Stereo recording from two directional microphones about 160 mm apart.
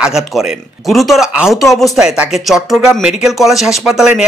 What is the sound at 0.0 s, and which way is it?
Speech, 5° right (ahead or behind).